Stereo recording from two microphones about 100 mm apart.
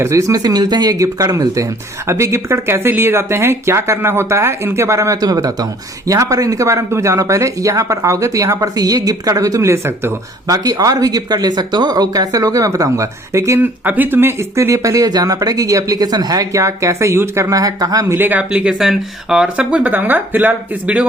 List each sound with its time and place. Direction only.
0.0 s speech: 30° right (ahead or behind)
10.4 s speech: 40° right (ahead or behind)
13.6 s speech: 15° right (ahead or behind); by 18.0 s 40° right (ahead or behind)
18.1 s speech: 20° right (ahead or behind)